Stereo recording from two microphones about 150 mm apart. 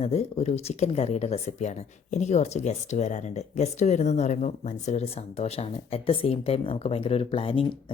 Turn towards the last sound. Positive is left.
turn(degrees=35)  # may be behind; listen again after turning